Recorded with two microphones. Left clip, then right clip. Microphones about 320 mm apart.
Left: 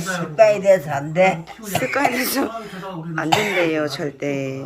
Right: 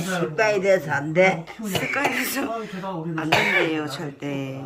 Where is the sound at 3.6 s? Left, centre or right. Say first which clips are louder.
Left 5 dB; centre.